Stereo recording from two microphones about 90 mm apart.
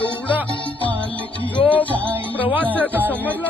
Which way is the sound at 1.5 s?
20° left (ahead or behind).